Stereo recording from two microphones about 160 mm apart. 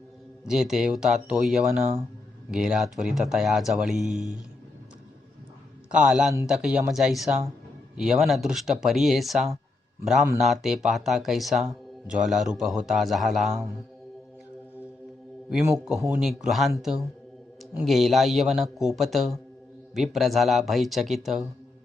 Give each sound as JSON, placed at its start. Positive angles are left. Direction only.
{"t": 0.4, "sound": "speech", "side_deg": -5}
{"t": 5.9, "sound": "speech", "side_deg": -5}
{"t": 15.7, "sound": "speech", "side_deg": -5}